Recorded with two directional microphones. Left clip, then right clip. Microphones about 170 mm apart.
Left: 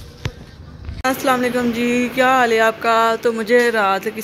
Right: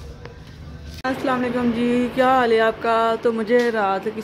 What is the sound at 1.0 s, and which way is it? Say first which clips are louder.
Speech: left 5 dB; 5° left (ahead or behind).